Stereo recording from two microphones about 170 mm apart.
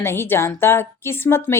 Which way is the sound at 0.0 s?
15° left (ahead or behind).